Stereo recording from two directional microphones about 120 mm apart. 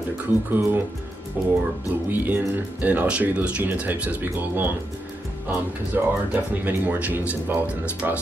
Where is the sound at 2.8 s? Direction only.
15° right (ahead or behind).